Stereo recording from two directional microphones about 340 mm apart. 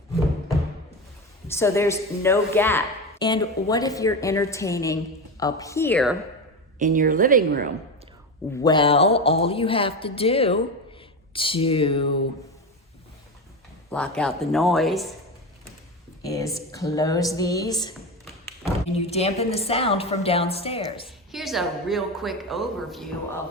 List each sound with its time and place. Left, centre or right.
1.5 s a woman's voice: centre
6.7 s a woman's voice: right
8.6 s a woman's voice: centre
13.9 s a woman's voice: centre
16.2 s a woman's voice: centre
18.9 s a woman's voice: centre
21.3 s a woman's voice: centre